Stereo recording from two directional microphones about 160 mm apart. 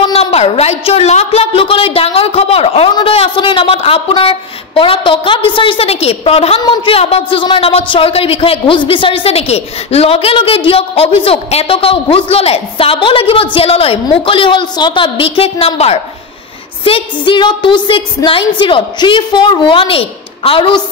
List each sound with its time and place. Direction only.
0.1 s a woman's voice: 40° left (ahead or behind)